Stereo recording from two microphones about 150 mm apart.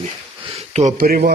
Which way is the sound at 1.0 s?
70° right (ahead or behind).